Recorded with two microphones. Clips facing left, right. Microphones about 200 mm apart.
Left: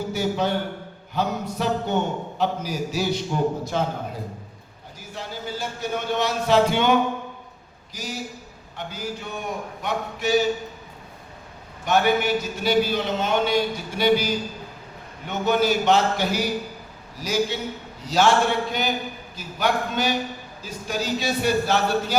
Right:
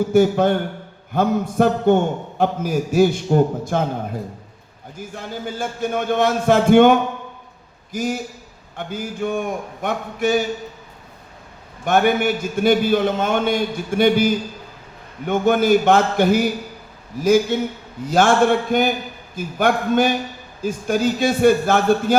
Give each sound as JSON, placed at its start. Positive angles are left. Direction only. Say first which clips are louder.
{"t": 0.1, "sound": "a man's voice", "louder": "right 8 dB", "side_deg": -50}
{"t": 4.9, "sound": "a man's voice", "louder": "right 5 dB", "side_deg": -50}
{"t": 7.9, "sound": "a man's voice", "louder": "right 9 dB", "side_deg": -50}
{"t": 11.9, "sound": "a man's voice", "louder": "right 3 dB", "side_deg": -50}